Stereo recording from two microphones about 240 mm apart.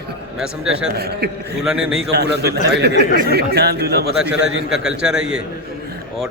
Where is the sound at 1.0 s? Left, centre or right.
Right.